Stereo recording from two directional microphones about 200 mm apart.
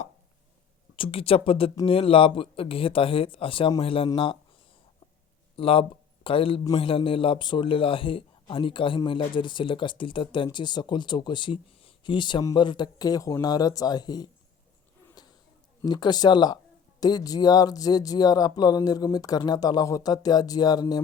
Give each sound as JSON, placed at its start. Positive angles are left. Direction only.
{"t": 0.9, "sound": "a man's voice", "side_deg": 25}
{"t": 5.5, "sound": "a man's voice", "side_deg": 30}
{"t": 15.8, "sound": "a man's voice", "side_deg": 20}